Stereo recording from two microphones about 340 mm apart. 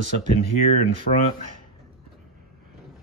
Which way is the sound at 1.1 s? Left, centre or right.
Left.